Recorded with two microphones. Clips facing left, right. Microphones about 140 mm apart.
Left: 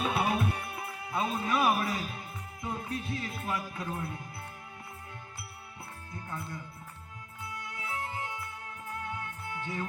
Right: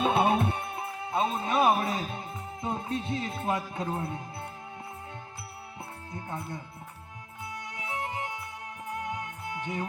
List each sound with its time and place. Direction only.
0.0 s music: 25° right (ahead or behind)
3.8 s speech: 25° right (ahead or behind)
6.1 s speech: 25° right (ahead or behind)
7.4 s music: 20° right (ahead or behind)